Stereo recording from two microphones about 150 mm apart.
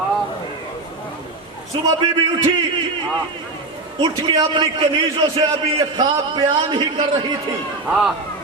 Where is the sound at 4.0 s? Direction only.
30° right (ahead or behind).